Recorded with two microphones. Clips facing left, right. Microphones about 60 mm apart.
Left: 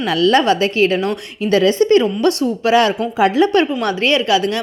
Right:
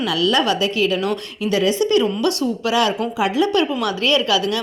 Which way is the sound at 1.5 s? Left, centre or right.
Left.